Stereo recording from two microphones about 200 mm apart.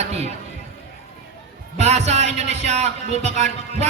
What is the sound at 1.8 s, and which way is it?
A man's voice, 35° right (ahead or behind).